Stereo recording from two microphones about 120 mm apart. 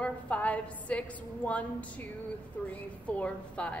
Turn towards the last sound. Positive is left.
turn(degrees=10)  # may be behind; listen again after turning